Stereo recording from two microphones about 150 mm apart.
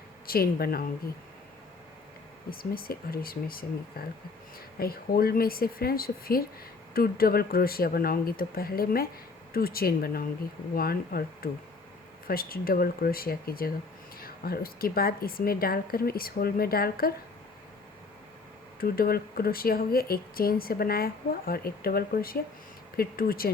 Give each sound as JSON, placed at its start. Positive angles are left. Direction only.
{"t": 0.3, "sound": "speech", "side_deg": 90}
{"t": 2.5, "sound": "speech", "side_deg": 75}
{"t": 18.8, "sound": "speech", "side_deg": 80}